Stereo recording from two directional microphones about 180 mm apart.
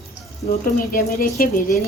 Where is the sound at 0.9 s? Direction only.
55° left (ahead or behind).